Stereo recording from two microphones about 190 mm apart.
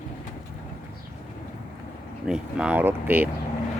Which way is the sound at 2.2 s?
5° right (ahead or behind).